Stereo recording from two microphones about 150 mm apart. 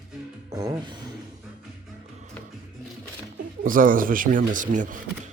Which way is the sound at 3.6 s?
65° right (ahead or behind).